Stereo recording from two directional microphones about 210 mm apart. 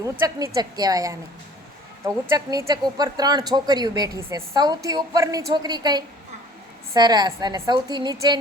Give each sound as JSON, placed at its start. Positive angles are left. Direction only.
{"t": 0.0, "sound": "a woman's voice", "side_deg": -15}